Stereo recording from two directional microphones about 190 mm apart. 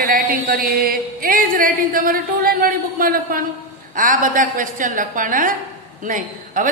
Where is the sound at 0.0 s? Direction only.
50° right (ahead or behind).